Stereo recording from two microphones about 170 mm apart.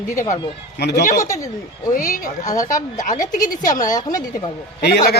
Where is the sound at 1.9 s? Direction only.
55° left (ahead or behind).